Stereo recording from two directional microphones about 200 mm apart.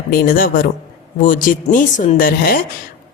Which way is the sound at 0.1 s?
45° left (ahead or behind).